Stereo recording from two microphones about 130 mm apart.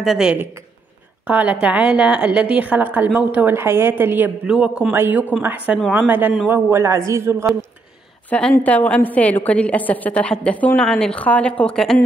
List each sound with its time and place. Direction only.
0.0 s a man's voice: 5° right (ahead or behind); by 7.4 s 20° right (ahead or behind)
8.3 s a woman's voice: 10° left (ahead or behind)